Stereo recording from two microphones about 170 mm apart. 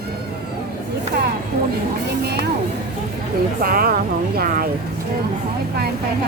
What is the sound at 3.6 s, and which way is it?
Speech, 60° right (ahead or behind).